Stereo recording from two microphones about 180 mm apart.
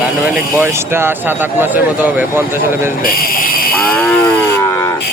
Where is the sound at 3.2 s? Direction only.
55° left (ahead or behind).